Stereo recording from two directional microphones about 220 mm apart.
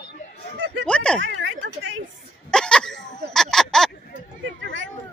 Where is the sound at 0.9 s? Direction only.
5° left (ahead or behind).